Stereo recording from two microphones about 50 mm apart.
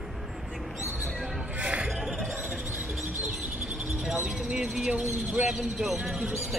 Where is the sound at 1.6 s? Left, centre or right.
Right.